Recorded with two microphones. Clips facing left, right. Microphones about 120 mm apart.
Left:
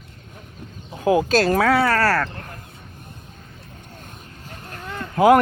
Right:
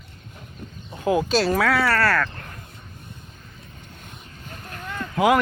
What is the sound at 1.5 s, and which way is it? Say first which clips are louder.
Speech: left 3 dB; 25° left (ahead or behind).